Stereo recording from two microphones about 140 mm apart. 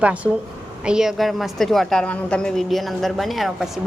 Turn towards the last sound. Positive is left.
turn(degrees=0)  # may be behind; listen again after turning